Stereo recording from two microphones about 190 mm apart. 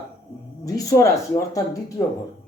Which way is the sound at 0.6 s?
20° left (ahead or behind).